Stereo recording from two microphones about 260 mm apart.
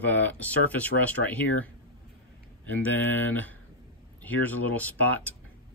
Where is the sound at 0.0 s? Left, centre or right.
Centre.